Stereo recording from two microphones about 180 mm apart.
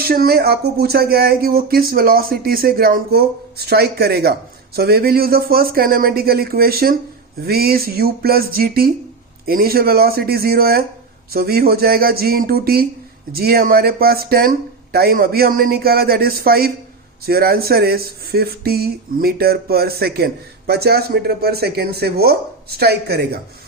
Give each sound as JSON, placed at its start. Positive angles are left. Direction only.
{"t": 0.0, "sound": "speech", "side_deg": -60}